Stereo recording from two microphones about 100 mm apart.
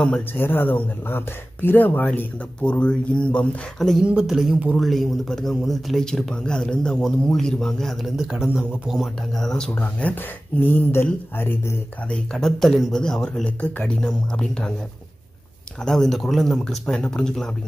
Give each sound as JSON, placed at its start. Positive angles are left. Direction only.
{"t": 0.3, "sound": "speech", "side_deg": 20}
{"t": 4.0, "sound": "a man's voice", "side_deg": -10}
{"t": 9.8, "sound": "speech", "side_deg": 15}
{"t": 12.1, "sound": "speech", "side_deg": 5}
{"t": 15.8, "sound": "a man's voice", "side_deg": 5}